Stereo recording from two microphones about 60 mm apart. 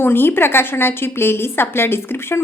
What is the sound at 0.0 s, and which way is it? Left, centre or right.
Speech, left.